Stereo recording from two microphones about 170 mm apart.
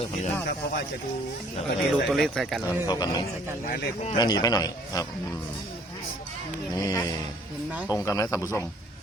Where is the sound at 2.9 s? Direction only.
25° left (ahead or behind).